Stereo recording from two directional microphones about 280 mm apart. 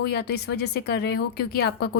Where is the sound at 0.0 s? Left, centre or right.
Left.